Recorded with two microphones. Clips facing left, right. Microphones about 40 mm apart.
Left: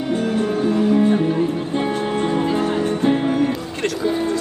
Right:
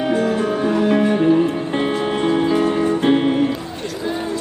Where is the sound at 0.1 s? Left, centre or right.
Right.